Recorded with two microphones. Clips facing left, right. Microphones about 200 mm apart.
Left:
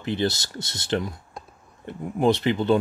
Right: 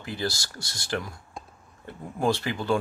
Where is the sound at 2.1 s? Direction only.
20° left (ahead or behind).